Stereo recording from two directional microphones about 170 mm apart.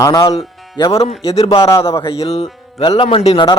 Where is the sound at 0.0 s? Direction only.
20° left (ahead or behind).